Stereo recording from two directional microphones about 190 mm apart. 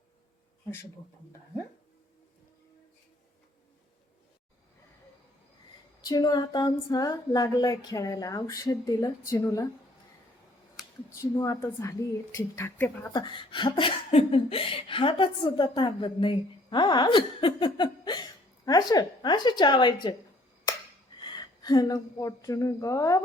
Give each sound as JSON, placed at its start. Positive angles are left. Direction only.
{"t": 6.0, "sound": "speech", "side_deg": 20}
{"t": 11.1, "sound": "a woman's voice", "side_deg": 15}
{"t": 13.1, "sound": "speech", "side_deg": 25}
{"t": 21.2, "sound": "a woman's voice", "side_deg": 25}